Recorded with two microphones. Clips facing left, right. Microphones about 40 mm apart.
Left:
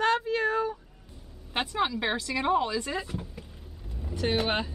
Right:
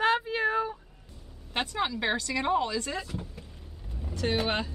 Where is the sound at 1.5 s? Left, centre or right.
Centre.